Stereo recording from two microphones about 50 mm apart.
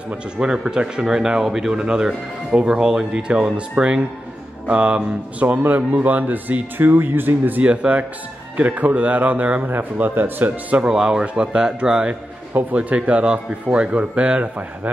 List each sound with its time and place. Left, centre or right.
0.4 s a man's voice: centre; by 7.6 s right
7.6 s speech: right
10.8 s a man's voice: centre